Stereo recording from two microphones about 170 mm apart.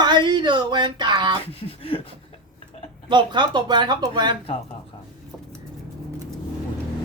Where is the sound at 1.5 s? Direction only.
35° left (ahead or behind).